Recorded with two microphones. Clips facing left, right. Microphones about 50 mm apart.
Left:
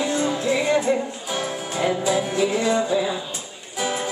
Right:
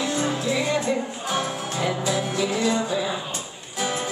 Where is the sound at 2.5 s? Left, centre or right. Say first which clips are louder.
Left 2 dB; left.